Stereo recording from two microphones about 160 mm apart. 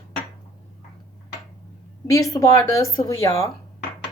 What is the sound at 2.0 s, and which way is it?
Speech, 20° left (ahead or behind).